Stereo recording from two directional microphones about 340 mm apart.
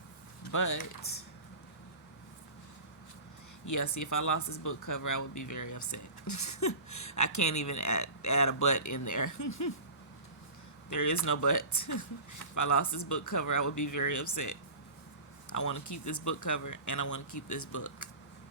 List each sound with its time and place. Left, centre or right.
0.5 s speech: left
3.7 s speech: left
10.8 s speech: left